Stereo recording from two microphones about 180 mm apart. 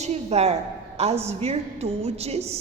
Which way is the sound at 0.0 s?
35° right (ahead or behind).